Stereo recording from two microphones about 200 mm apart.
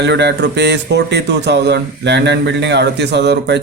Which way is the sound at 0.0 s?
60° right (ahead or behind).